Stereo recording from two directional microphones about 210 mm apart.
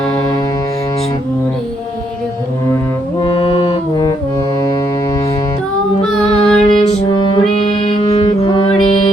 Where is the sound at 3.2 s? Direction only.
25° left (ahead or behind).